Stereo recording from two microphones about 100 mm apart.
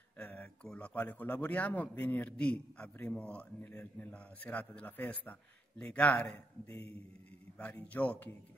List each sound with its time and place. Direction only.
0.2 s speech: 15° left (ahead or behind)